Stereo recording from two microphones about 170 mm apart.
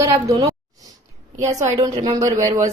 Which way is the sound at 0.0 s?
20° right (ahead or behind).